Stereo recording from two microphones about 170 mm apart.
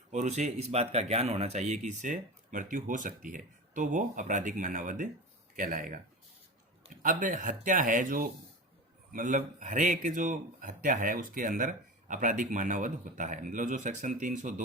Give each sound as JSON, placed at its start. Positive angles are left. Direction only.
{"t": 0.1, "sound": "speech", "side_deg": -45}